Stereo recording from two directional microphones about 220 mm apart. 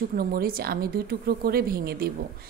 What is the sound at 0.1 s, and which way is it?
A woman's voice, 40° right (ahead or behind).